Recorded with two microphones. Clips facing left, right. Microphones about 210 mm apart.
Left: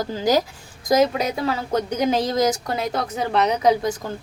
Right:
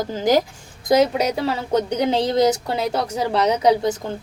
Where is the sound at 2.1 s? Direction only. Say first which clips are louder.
Right 3 dB; 25° right (ahead or behind).